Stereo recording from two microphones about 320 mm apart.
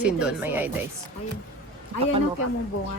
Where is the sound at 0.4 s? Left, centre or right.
Centre.